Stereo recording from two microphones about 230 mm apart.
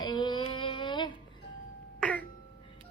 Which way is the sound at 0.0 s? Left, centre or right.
Centre.